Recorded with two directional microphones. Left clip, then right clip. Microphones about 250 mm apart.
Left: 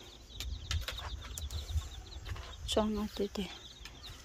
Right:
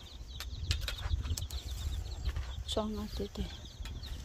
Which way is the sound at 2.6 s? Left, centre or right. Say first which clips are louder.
Left 4 dB; centre.